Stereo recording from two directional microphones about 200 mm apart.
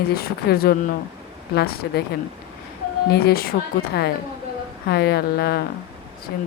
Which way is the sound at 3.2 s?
50° left (ahead or behind).